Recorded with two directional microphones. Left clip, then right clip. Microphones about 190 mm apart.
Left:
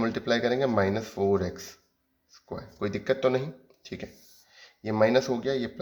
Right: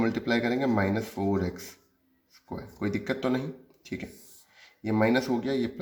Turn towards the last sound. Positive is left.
turn(degrees=25)  # may be behind; listen again after turning